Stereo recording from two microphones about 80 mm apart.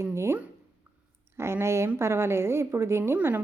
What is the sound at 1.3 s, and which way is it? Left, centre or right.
A woman's voice, right.